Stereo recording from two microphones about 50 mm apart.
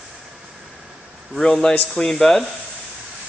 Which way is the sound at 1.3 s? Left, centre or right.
Centre.